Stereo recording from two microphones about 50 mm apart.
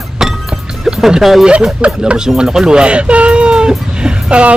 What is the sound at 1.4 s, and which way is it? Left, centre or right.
A man's voice, centre.